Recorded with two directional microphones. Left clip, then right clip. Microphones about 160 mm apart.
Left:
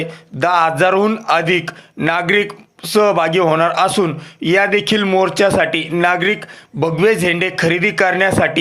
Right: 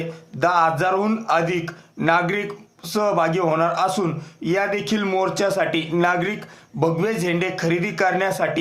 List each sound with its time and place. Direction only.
0.0 s speech: 25° left (ahead or behind)